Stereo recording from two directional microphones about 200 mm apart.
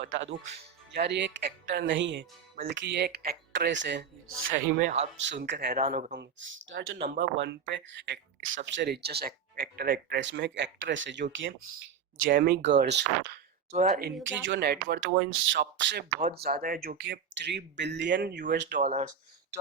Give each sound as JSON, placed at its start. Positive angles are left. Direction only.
{"t": 0.1, "sound": "speech", "side_deg": -70}
{"t": 0.9, "sound": "speech", "side_deg": -60}
{"t": 4.8, "sound": "speech", "side_deg": -40}
{"t": 5.2, "sound": "speech", "side_deg": -65}
{"t": 5.8, "sound": "speech", "side_deg": -35}
{"t": 6.7, "sound": "speech", "side_deg": -75}
{"t": 12.3, "sound": "speech", "side_deg": -55}
{"t": 14.4, "sound": "speech", "side_deg": -60}
{"t": 18.8, "sound": "speech", "side_deg": -35}